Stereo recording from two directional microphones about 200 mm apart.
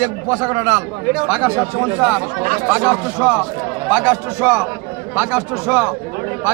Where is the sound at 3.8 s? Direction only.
10° right (ahead or behind).